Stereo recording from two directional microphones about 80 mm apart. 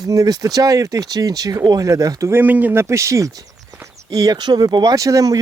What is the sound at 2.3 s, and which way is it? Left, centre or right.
Speech, right.